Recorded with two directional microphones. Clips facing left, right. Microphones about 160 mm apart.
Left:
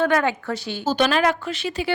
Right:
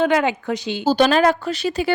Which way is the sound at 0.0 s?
15° right (ahead or behind).